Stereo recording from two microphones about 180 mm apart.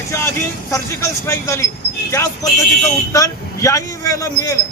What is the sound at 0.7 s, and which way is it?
Speech, 15° left (ahead or behind).